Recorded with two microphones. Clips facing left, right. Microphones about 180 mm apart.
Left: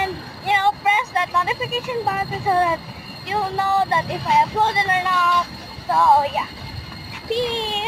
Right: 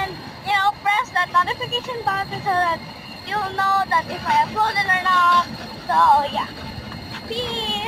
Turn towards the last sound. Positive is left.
turn(degrees=20)  # may be behind; listen again after turning